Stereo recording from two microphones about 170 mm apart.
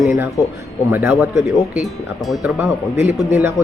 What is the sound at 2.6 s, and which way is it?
Speech, 10° right (ahead or behind).